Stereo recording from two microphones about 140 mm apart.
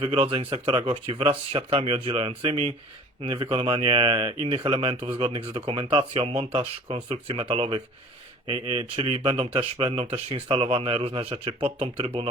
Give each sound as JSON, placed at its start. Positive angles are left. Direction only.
{"t": 0.0, "sound": "speech", "side_deg": -40}